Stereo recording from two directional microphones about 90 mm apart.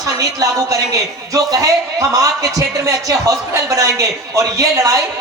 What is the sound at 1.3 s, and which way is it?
A man's voice, 40° right (ahead or behind).